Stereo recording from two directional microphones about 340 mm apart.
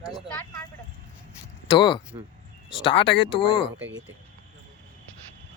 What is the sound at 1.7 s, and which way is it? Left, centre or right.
Speech, centre.